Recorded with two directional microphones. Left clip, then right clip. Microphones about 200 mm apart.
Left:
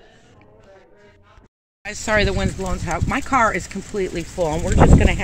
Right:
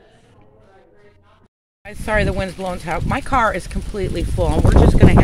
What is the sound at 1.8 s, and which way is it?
Speech, 5° right (ahead or behind).